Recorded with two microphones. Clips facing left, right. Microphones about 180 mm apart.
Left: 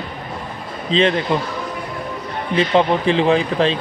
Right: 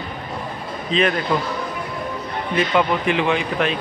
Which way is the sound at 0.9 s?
25° left (ahead or behind).